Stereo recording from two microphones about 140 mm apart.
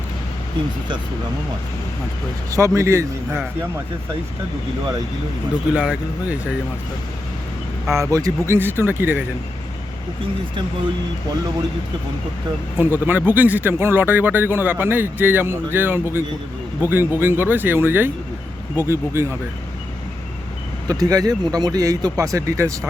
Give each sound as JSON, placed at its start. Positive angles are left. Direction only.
{"t": 2.5, "sound": "speech", "side_deg": -20}
{"t": 5.7, "sound": "speech", "side_deg": -10}
{"t": 7.9, "sound": "speech", "side_deg": -20}
{"t": 12.7, "sound": "speech", "side_deg": -15}
{"t": 20.8, "sound": "speech", "side_deg": -25}